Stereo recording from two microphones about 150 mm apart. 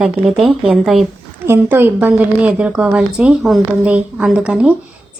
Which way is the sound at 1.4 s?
15° right (ahead or behind).